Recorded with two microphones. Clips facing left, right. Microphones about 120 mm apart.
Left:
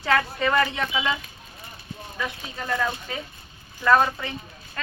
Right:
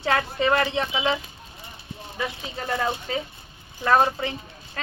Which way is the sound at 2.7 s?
25° right (ahead or behind).